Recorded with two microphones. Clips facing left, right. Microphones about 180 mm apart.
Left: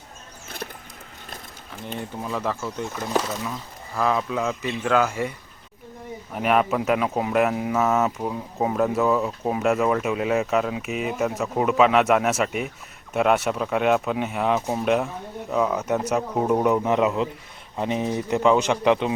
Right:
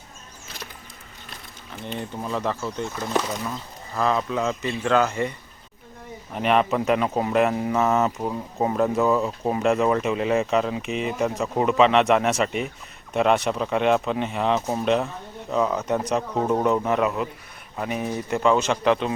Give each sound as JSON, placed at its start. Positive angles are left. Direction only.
{"t": 0.4, "sound": "a sound", "side_deg": 55}
{"t": 1.9, "sound": "speech", "side_deg": 5}
{"t": 6.3, "sound": "speech", "side_deg": 5}